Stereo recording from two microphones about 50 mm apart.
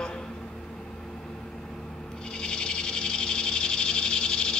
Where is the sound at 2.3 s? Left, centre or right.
Centre.